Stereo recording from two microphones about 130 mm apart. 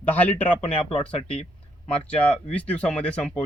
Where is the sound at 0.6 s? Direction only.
45° left (ahead or behind).